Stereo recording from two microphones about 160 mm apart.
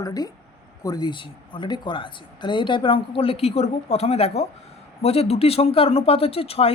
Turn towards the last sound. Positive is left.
turn(degrees=35)  # may be behind; listen again after turning